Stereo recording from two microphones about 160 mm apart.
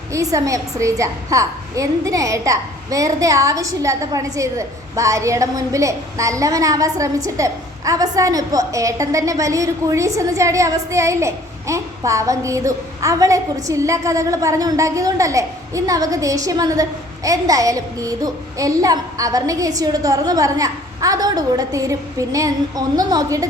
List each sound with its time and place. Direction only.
0.1 s a woman's voice: 20° right (ahead or behind)